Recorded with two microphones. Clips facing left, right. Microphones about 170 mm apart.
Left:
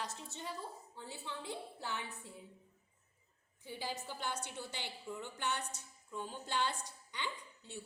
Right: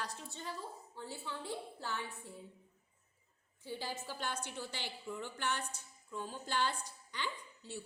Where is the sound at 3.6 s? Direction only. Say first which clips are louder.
Right 1 dB; 15° left (ahead or behind).